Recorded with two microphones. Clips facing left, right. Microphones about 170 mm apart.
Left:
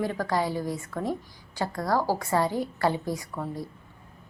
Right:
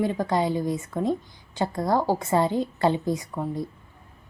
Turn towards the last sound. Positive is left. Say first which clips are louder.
# right 4 dB
turn(degrees=-20)  # may be behind; listen again after turning